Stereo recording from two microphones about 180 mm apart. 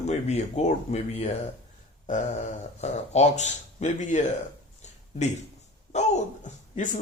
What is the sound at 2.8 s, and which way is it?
Speech, 40° left (ahead or behind).